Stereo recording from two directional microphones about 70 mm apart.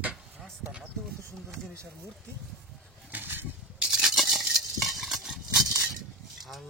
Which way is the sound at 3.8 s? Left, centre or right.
Centre.